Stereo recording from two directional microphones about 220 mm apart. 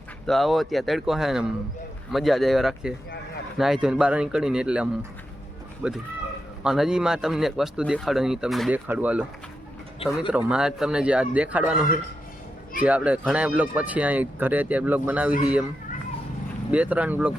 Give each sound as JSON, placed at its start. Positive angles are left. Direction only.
{"t": 0.3, "sound": "speech", "side_deg": 0}
{"t": 10.0, "sound": "speech", "side_deg": 25}
{"t": 10.3, "sound": "speech", "side_deg": -5}
{"t": 12.8, "sound": "speech", "side_deg": -5}
{"t": 16.7, "sound": "speech", "side_deg": -5}